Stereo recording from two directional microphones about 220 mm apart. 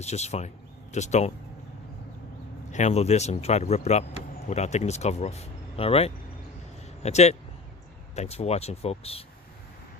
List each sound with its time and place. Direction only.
0.0 s speech: 30° left (ahead or behind)
2.7 s speech: 30° left (ahead or behind)